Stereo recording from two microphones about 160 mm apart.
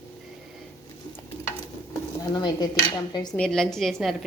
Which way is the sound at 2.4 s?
25° left (ahead or behind).